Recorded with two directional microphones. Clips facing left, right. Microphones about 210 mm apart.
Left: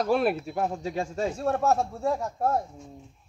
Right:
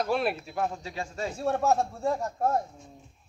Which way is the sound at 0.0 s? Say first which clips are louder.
Left 4 dB; 45° left (ahead or behind).